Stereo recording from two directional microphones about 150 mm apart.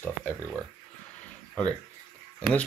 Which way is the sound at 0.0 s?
10° left (ahead or behind).